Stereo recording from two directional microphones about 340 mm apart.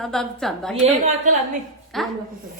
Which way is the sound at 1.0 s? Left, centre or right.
Right.